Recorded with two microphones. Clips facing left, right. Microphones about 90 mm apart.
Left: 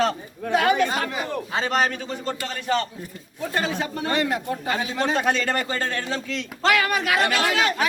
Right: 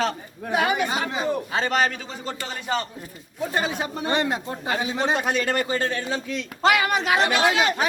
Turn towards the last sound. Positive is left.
turn(degrees=-20)  # may be behind; listen again after turning